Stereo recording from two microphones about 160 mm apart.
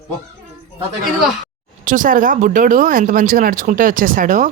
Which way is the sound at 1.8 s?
55° right (ahead or behind).